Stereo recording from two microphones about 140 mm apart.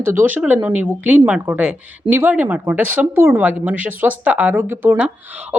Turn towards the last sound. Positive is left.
turn(degrees=-10)  # may be behind; listen again after turning